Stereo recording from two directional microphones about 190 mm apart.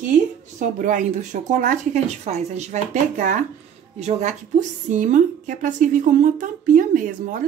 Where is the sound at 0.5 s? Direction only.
45° right (ahead or behind).